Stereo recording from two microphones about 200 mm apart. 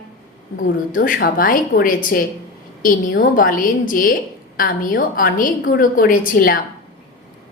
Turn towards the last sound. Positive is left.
turn(degrees=45)  # may be behind; listen again after turning